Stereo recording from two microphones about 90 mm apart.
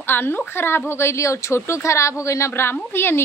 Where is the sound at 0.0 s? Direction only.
25° left (ahead or behind).